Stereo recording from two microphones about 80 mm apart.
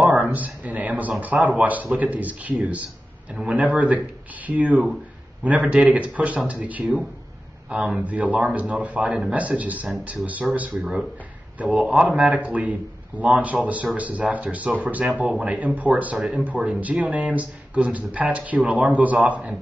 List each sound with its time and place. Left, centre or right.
0.0 s a sound: centre
1.2 s speech: centre
10.8 s speech: centre
11.5 s a man's voice: centre